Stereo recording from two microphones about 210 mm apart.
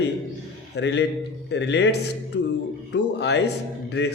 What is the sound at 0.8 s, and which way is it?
Speech, 55° left (ahead or behind).